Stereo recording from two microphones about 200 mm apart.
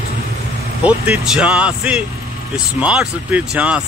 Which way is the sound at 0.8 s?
5° right (ahead or behind).